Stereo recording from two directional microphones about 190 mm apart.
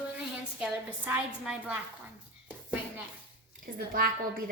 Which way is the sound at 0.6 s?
5° right (ahead or behind).